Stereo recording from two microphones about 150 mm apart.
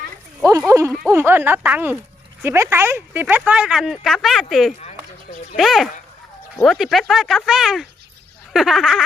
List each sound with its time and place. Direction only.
0.7 s speech: 20° right (ahead or behind); by 9.0 s centre (ahead or behind)